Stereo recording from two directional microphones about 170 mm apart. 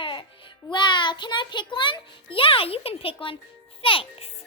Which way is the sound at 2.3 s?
30° left (ahead or behind).